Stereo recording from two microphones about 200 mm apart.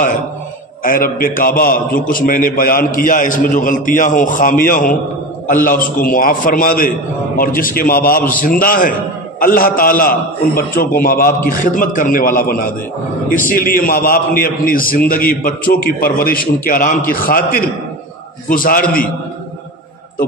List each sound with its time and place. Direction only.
0.8 s a man's voice: 45° left (ahead or behind)